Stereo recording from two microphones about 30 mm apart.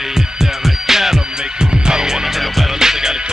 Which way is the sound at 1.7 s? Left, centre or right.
Right.